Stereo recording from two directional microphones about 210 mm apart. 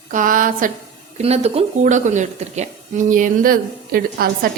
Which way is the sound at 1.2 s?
30° right (ahead or behind).